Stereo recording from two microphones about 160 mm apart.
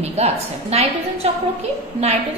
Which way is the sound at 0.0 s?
40° right (ahead or behind).